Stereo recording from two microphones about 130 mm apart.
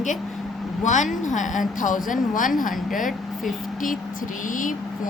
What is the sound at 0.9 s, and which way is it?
A woman's voice, 70° left (ahead or behind).